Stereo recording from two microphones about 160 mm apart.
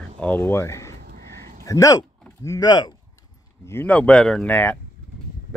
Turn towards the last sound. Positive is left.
turn(degrees=10)  # may be behind; listen again after turning